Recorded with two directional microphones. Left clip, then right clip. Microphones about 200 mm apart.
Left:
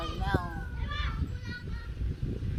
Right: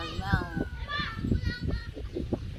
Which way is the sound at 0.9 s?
50° left (ahead or behind).